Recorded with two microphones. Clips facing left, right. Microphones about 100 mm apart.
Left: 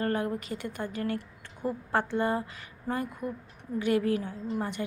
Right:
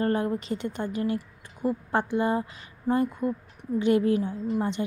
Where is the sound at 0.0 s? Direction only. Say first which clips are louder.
Right 4 dB; 25° right (ahead or behind).